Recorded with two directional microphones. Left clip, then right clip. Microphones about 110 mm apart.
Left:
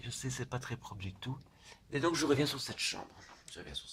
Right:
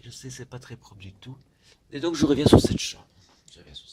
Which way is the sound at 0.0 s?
Centre (ahead or behind).